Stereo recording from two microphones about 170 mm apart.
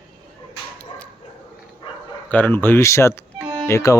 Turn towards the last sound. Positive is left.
turn(degrees=20)  # may be behind; listen again after turning